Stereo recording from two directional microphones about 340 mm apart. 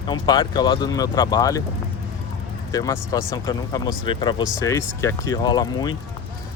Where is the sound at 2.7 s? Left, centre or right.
Centre.